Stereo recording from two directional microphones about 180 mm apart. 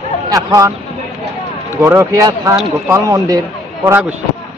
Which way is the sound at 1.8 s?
15° right (ahead or behind).